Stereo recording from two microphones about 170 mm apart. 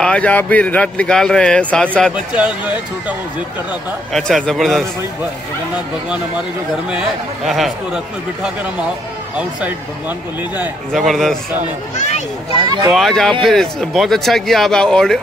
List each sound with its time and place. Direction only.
0.0 s a man's voice: 5° left (ahead or behind)
2.3 s speech: 10° right (ahead or behind)
4.1 s a man's voice: centre (ahead or behind)
7.4 s a man's voice: centre (ahead or behind)
12.5 s speech: 25° right (ahead or behind)
12.9 s a man's voice: centre (ahead or behind)